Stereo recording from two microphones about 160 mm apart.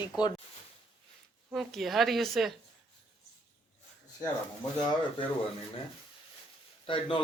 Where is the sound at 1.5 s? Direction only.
Centre (ahead or behind).